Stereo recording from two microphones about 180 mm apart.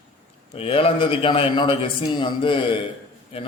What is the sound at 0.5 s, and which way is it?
A man's voice, 30° left (ahead or behind).